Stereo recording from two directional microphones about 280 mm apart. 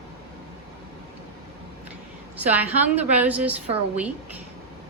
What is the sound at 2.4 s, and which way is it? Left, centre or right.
A woman's voice, centre.